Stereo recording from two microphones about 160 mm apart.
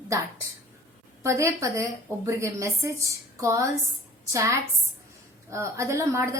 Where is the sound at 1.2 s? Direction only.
20° right (ahead or behind).